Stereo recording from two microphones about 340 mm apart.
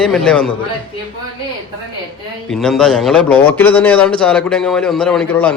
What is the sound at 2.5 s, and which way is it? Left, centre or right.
A man's voice, centre.